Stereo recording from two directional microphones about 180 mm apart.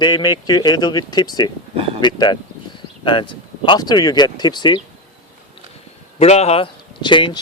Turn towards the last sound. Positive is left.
turn(degrees=25)  # may be behind; listen again after turning